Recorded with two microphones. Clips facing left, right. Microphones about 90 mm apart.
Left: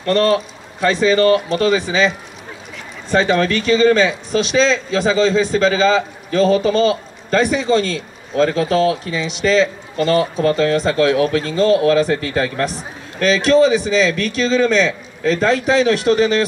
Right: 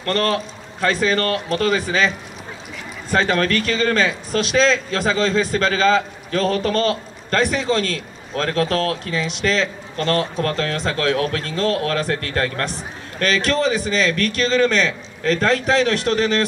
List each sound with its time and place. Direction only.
0.0 s a man's voice: 5° left (ahead or behind)